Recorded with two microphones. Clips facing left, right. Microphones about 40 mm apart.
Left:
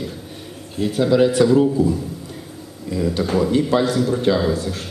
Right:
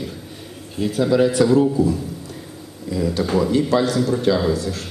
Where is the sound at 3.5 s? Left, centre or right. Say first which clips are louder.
Even; left.